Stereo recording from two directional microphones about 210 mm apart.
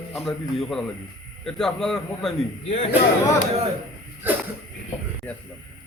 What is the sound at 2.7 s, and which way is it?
Speech, 30° left (ahead or behind).